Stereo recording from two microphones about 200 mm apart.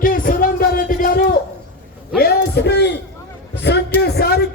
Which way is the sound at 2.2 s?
55° left (ahead or behind).